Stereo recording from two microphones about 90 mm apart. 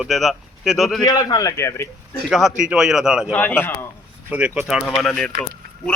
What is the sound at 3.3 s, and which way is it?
Speech, 20° left (ahead or behind).